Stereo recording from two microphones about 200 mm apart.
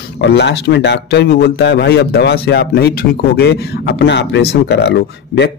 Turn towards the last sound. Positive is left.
turn(degrees=55)  # may be behind; listen again after turning